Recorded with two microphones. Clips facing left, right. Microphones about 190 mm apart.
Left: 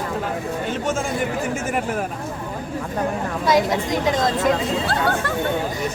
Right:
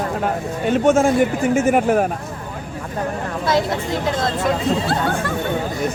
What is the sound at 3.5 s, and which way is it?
Speech, 15° left (ahead or behind).